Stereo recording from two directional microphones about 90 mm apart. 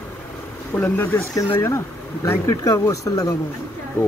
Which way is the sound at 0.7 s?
20° left (ahead or behind).